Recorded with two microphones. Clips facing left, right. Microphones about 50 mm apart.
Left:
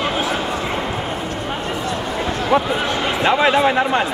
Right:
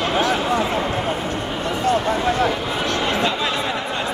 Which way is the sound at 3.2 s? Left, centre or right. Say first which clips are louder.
Left 7 dB; left.